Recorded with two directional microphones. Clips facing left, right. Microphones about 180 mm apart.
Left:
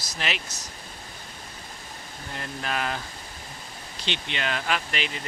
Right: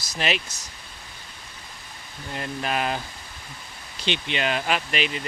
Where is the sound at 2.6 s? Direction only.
20° right (ahead or behind).